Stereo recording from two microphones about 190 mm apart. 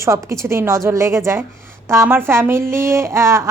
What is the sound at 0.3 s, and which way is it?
A woman's voice, 15° right (ahead or behind).